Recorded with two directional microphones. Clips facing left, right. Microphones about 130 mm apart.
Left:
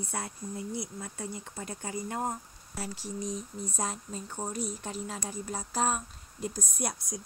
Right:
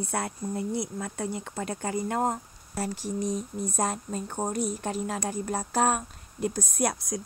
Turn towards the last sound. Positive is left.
turn(degrees=-85)